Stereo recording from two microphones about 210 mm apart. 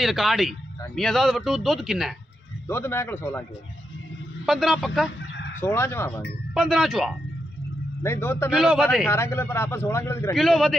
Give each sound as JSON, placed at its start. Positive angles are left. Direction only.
{"t": 0.0, "sound": "speech", "side_deg": 0}
{"t": 2.7, "sound": "speech", "side_deg": 10}
{"t": 4.5, "sound": "speech", "side_deg": 0}
{"t": 5.2, "sound": "fowl", "side_deg": 60}
{"t": 5.6, "sound": "speech", "side_deg": 10}
{"t": 6.5, "sound": "speech", "side_deg": 0}
{"t": 8.0, "sound": "speech", "side_deg": 10}
{"t": 8.5, "sound": "speech", "side_deg": -5}
{"t": 9.0, "sound": "speech", "side_deg": 10}
{"t": 10.3, "sound": "speech", "side_deg": 0}